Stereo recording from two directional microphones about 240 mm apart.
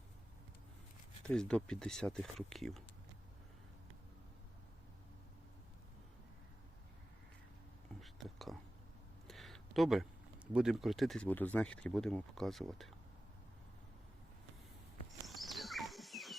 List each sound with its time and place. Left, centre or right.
1.2 s speech: centre
8.0 s whispering: centre
9.2 s speech: centre
15.3 s a sound: centre